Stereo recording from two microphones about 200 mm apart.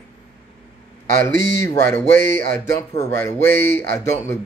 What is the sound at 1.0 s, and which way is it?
Speech, 45° right (ahead or behind).